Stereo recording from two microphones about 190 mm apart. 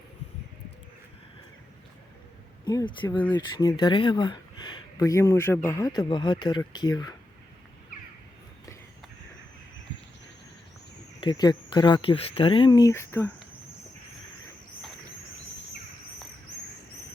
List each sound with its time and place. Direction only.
2.6 s speech: 25° left (ahead or behind)
11.2 s speech: 20° left (ahead or behind)